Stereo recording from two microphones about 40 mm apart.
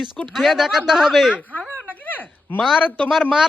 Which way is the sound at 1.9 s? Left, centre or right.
Left.